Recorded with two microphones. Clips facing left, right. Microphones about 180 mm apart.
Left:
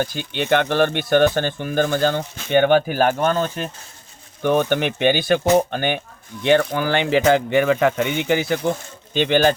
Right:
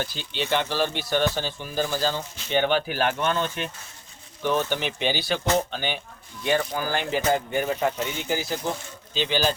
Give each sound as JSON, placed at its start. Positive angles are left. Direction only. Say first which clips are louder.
{"t": 0.0, "sound": "speech", "louder": "left 6 dB", "side_deg": 50}
{"t": 4.4, "sound": "speech", "louder": "left 7 dB", "side_deg": 55}
{"t": 6.4, "sound": "speech", "louder": "left 7 dB", "side_deg": 70}
{"t": 7.9, "sound": "speech", "louder": "left 8 dB", "side_deg": 65}